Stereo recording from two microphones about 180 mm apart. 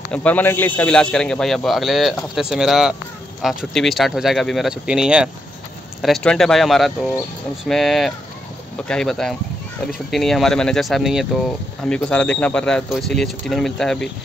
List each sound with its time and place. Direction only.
0.1 s speech: 10° left (ahead or behind)